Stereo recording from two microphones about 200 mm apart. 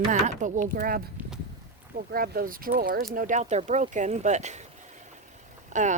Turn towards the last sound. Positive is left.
turn(degrees=-40)  # may be behind; listen again after turning